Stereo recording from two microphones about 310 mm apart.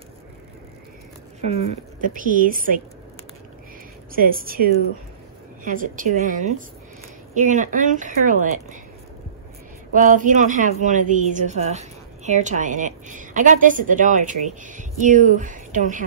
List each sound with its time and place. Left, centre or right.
1.5 s speech: centre
4.1 s speech: right
10.0 s speech: right